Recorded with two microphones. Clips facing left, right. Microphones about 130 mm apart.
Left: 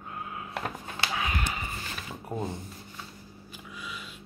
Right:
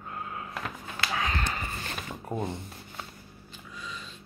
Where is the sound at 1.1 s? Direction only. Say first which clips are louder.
Right 2 dB; 15° left (ahead or behind).